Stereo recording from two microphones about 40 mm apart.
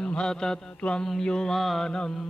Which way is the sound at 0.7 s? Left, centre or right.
Left.